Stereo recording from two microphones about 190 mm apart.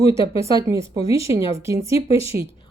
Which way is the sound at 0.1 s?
15° right (ahead or behind).